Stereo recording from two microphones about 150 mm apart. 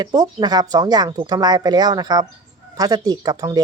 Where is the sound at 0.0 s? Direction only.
25° right (ahead or behind).